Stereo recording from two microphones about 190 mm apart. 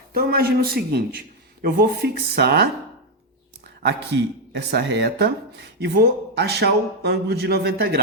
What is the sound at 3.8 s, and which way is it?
Speech, 65° right (ahead or behind).